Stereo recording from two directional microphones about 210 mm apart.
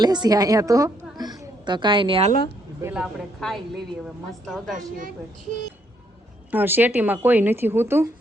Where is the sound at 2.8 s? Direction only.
10° right (ahead or behind).